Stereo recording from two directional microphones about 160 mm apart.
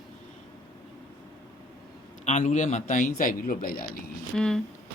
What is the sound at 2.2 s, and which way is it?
A man's voice, 50° left (ahead or behind).